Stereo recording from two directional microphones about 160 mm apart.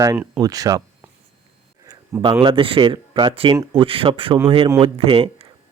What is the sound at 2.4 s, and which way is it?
Speech, 35° right (ahead or behind).